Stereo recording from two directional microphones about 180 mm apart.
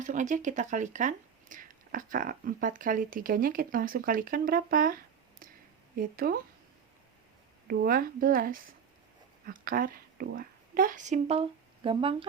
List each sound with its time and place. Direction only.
0.0 s speech: 45° right (ahead or behind)
6.0 s speech: 55° right (ahead or behind)
7.7 s speech: 55° right (ahead or behind); by 12.3 s 30° right (ahead or behind)